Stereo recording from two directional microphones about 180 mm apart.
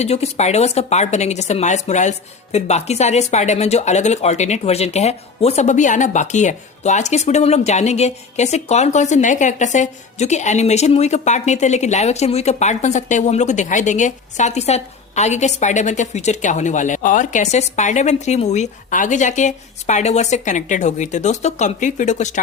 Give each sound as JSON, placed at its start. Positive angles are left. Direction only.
{"t": 0.0, "sound": "speech", "side_deg": 35}